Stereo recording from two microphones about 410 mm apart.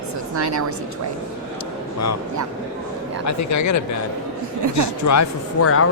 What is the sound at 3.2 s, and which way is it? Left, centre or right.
Speech, left.